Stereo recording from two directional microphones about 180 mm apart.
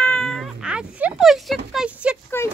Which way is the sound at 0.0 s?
5° left (ahead or behind).